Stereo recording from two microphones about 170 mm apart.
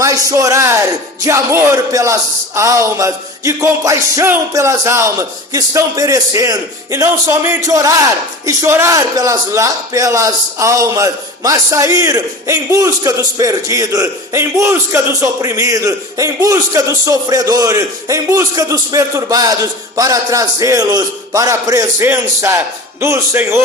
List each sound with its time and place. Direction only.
0.0 s music: 20° right (ahead or behind)
8.4 s a man's voice: 15° right (ahead or behind)
20.0 s music: 20° right (ahead or behind)